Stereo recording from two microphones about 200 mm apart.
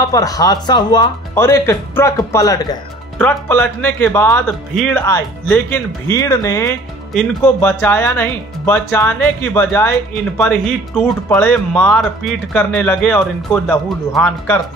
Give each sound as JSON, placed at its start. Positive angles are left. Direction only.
{"t": 0.0, "sound": "speech", "side_deg": 15}
{"t": 3.2, "sound": "speech", "side_deg": 10}